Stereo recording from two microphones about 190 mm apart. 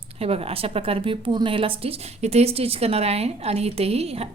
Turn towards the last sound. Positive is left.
turn(degrees=-35)  # may be behind; listen again after turning